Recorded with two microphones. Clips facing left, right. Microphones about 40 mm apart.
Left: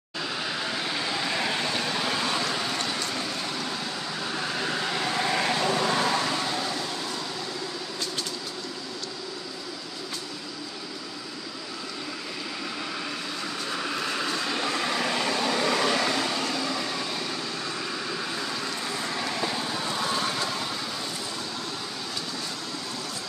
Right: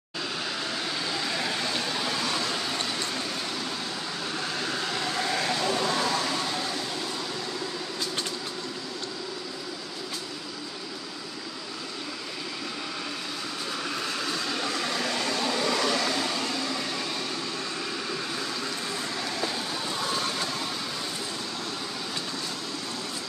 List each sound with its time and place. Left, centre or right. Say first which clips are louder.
0.5 s vehicle: left 2 dB; centre
2.4 s a sound: left 1 dB; centre
4.2 s vehicle: left 2 dB; centre
6.2 s vehicle: left 1 dB; centre
13.7 s vehicle: left 3 dB; centre